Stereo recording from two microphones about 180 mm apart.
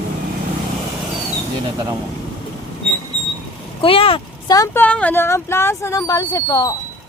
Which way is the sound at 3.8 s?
30° left (ahead or behind).